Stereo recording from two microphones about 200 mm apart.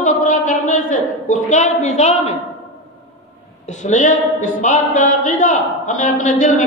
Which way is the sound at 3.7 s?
40° left (ahead or behind).